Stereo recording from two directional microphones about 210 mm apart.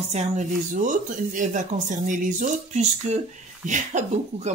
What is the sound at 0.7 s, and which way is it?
Music, 40° right (ahead or behind).